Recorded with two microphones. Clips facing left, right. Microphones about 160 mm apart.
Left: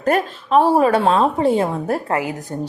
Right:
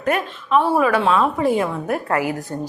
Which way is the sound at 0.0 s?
35° left (ahead or behind).